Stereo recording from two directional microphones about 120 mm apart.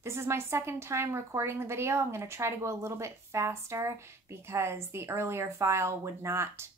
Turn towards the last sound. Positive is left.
turn(degrees=-20)  # may be behind; listen again after turning